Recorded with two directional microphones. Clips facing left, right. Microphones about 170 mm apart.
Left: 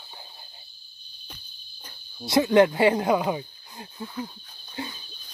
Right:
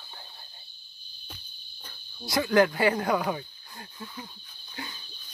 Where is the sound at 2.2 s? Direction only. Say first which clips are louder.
Left 4 dB; 25° left (ahead or behind).